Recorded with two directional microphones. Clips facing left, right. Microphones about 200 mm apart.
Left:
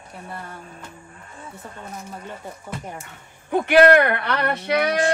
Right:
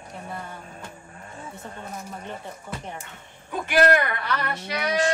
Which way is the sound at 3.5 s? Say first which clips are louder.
Left 6 dB; 60° left (ahead or behind).